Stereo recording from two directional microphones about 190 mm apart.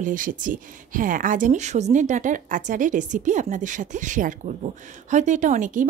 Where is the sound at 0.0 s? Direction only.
45° right (ahead or behind).